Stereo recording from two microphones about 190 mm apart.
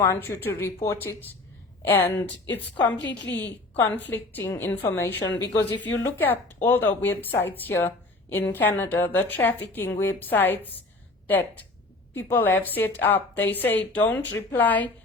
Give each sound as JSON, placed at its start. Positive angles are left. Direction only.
{"t": 0.0, "sound": "speech", "side_deg": 10}
{"t": 3.0, "sound": "a woman's voice", "side_deg": 70}
{"t": 3.3, "sound": "speech", "side_deg": 10}